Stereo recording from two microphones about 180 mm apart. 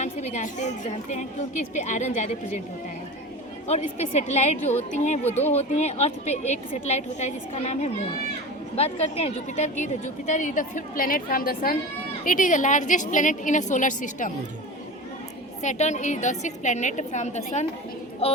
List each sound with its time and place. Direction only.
0.0 s a woman's voice: 40° left (ahead or behind)
3.7 s a woman's voice: 35° left (ahead or behind)
15.6 s a woman's voice: 40° left (ahead or behind)